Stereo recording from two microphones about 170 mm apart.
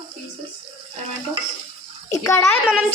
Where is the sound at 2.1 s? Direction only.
15° left (ahead or behind).